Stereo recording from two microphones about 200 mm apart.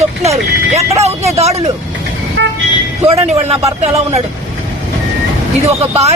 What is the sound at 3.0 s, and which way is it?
Speech, 30° right (ahead or behind).